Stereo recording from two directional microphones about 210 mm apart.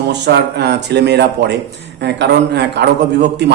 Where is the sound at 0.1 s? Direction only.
50° right (ahead or behind).